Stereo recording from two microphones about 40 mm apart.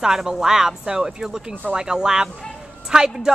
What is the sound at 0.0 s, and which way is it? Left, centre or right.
A woman's voice, centre.